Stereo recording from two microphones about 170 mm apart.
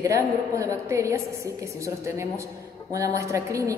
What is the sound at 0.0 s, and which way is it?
A woman's voice, 20° right (ahead or behind).